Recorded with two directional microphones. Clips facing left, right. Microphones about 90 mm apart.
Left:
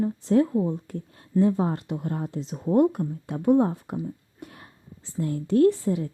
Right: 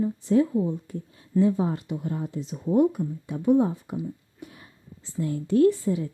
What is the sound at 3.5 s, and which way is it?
Speech, 50° left (ahead or behind).